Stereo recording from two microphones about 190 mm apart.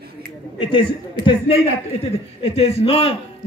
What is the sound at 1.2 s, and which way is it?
A man's voice, 25° left (ahead or behind).